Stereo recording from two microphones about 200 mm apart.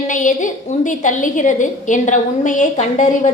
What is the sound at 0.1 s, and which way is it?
A woman's voice, 40° left (ahead or behind).